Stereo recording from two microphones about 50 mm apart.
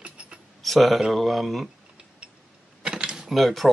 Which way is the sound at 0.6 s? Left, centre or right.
Centre.